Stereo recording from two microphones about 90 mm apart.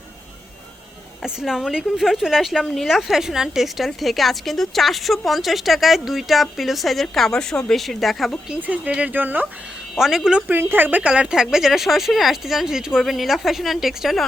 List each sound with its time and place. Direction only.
1.2 s speech: 5° right (ahead or behind)
8.4 s speech: 15° right (ahead or behind)
9.9 s speech: 5° right (ahead or behind)
10.5 s speech: 25° right (ahead or behind); by 14.3 s centre (ahead or behind)